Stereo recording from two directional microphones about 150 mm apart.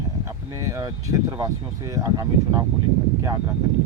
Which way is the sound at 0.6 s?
20° right (ahead or behind).